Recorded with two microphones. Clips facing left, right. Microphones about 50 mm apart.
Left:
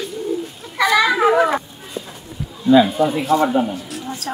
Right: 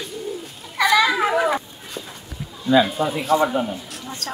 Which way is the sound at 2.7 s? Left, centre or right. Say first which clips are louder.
Left 4 dB; centre.